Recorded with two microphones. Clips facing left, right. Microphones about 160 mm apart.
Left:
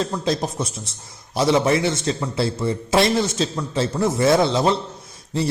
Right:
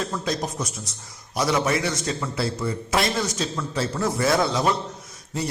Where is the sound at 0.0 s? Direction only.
30° left (ahead or behind).